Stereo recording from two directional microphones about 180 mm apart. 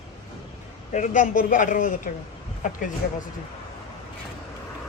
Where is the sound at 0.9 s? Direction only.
45° left (ahead or behind).